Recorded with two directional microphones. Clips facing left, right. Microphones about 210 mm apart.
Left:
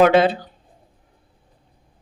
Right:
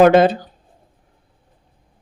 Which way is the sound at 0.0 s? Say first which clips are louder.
Right 3 dB; 45° right (ahead or behind).